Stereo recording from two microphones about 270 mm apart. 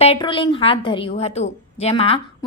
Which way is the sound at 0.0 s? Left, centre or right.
Left.